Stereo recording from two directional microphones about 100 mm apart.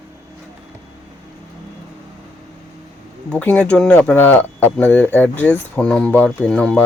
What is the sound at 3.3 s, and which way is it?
Speech, 10° left (ahead or behind).